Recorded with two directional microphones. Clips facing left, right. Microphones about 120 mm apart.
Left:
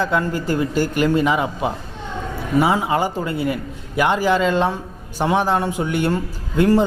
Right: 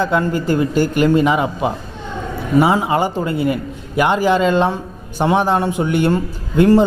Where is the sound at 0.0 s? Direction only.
20° right (ahead or behind).